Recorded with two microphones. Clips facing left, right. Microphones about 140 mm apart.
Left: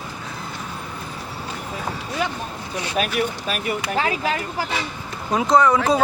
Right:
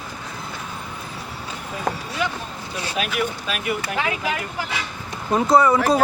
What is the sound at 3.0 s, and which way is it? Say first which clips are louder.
Speech: left 2 dB; 45° left (ahead or behind).